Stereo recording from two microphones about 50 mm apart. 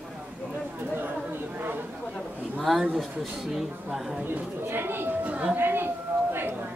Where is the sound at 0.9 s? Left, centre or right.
Right.